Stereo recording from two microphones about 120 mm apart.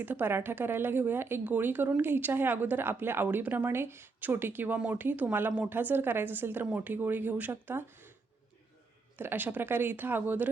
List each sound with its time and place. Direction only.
0.0 s speech: 15° right (ahead or behind)
9.1 s speech: 15° right (ahead or behind)